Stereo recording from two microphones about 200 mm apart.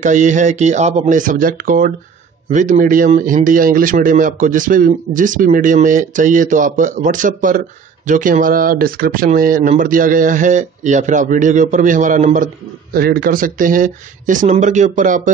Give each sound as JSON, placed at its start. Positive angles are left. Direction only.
{"t": 0.0, "sound": "speech", "side_deg": -40}